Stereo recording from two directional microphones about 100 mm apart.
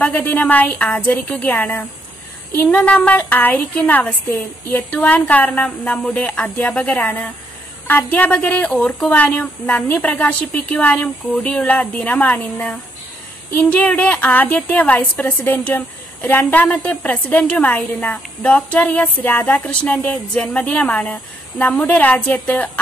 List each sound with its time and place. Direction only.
0.0 s a woman's voice: 20° left (ahead or behind)